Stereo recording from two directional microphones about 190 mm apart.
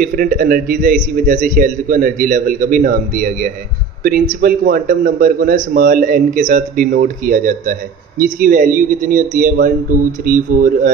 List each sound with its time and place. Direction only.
0.0 s a man's voice: 45° right (ahead or behind)